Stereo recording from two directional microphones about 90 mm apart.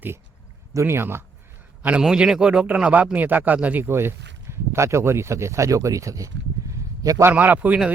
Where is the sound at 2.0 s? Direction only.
10° right (ahead or behind); by 7.3 s 40° right (ahead or behind).